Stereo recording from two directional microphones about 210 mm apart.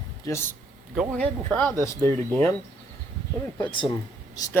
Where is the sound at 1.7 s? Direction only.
15° right (ahead or behind).